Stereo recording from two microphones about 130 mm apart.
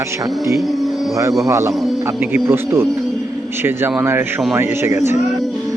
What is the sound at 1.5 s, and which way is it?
A man's voice, 20° right (ahead or behind).